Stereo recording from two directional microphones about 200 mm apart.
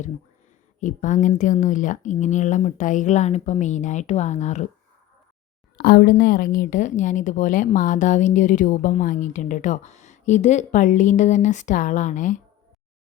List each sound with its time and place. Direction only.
0.8 s speech: 40° left (ahead or behind)
5.7 s speech: 50° left (ahead or behind)